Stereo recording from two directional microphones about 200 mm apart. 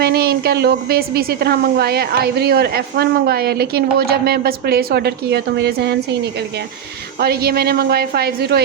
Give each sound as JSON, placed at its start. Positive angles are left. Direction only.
{"t": 0.0, "sound": "a woman's voice", "side_deg": -50}
{"t": 7.2, "sound": "a woman's voice", "side_deg": -50}